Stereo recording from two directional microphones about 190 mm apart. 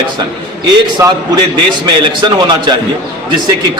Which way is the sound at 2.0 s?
20° right (ahead or behind).